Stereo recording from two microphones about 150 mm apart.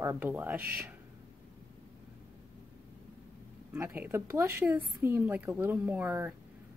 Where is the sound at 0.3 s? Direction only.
10° right (ahead or behind).